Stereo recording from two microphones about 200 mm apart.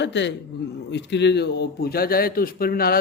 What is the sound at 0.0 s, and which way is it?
A man's voice, 60° left (ahead or behind).